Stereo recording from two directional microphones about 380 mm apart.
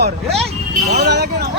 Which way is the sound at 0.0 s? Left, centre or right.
Right.